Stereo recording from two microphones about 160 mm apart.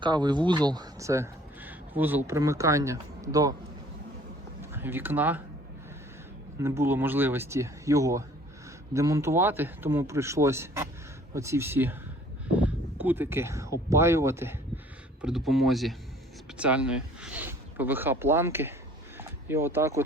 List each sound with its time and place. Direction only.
0.0 s speech: 25° right (ahead or behind)
4.6 s speech: 15° right (ahead or behind)
6.6 s speech: 15° right (ahead or behind)
15.2 s speech: centre (ahead or behind)
19.1 s a sound: 15° right (ahead or behind)